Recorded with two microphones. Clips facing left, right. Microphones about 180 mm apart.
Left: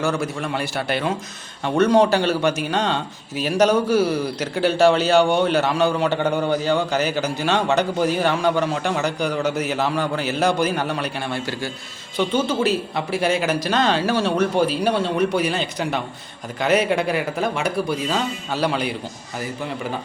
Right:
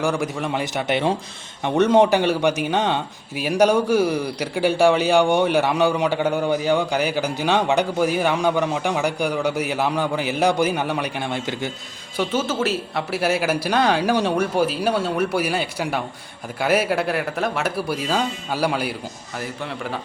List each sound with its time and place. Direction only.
0.0 s a man's voice: 15° right (ahead or behind)
12.1 s a man's voice: 5° right (ahead or behind)